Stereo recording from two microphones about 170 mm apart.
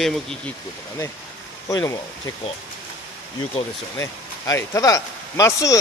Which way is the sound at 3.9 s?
15° left (ahead or behind).